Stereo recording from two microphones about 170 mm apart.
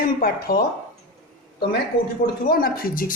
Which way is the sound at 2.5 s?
65° left (ahead or behind).